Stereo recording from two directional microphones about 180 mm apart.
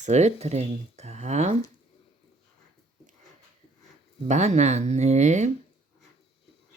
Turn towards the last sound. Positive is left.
turn(degrees=-40)  # may be behind; listen again after turning